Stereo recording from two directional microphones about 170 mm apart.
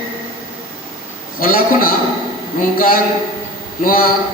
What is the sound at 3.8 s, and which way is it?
Speech, 55° left (ahead or behind).